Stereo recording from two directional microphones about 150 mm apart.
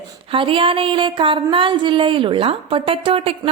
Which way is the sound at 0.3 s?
35° right (ahead or behind).